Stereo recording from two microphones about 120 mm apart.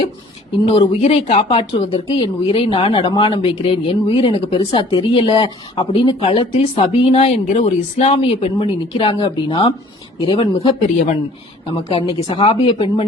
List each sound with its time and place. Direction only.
0.6 s speech: 55° left (ahead or behind)
4.8 s speech: 40° left (ahead or behind); by 8.1 s 70° left (ahead or behind)
8.1 s speech: 50° left (ahead or behind)
11.9 s speech: 50° left (ahead or behind)